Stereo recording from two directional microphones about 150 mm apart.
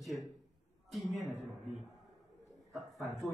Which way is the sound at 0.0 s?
Centre (ahead or behind).